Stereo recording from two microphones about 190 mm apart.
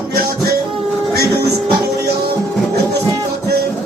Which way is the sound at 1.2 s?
55° right (ahead or behind).